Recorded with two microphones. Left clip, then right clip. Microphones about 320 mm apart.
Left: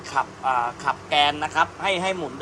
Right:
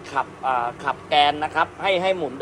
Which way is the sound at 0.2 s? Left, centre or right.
Centre.